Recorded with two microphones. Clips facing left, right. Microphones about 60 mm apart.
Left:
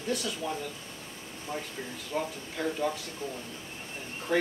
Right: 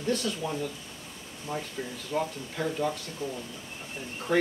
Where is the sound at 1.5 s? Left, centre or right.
Centre.